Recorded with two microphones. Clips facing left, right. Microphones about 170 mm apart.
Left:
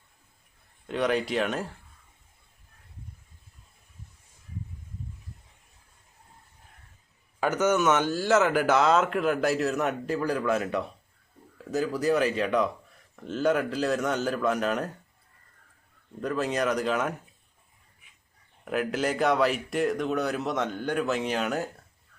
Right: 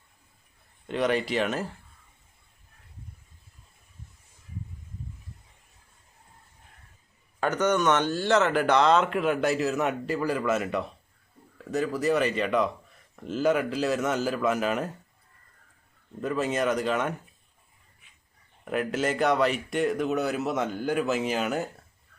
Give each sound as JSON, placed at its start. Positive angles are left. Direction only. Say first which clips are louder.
{"t": 0.9, "sound": "speech", "louder": "even", "side_deg": 0}
{"t": 7.3, "sound": "speech", "louder": "left 1 dB", "side_deg": 5}
{"t": 16.2, "sound": "speech", "louder": "right 1 dB", "side_deg": 0}
{"t": 18.6, "sound": "speech", "louder": "even", "side_deg": 0}